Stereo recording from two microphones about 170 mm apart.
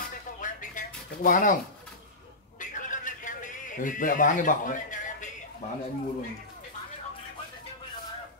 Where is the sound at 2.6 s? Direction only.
50° left (ahead or behind).